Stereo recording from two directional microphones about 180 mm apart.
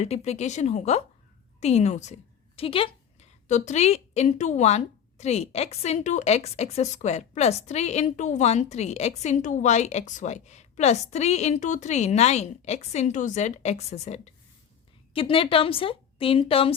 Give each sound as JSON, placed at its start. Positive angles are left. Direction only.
{"t": 0.0, "sound": "a woman's voice", "side_deg": 35}